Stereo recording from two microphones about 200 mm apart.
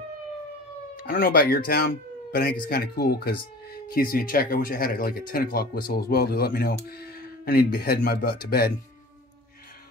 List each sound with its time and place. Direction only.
0.9 s speech: 45° left (ahead or behind)
2.6 s speech: 50° left (ahead or behind)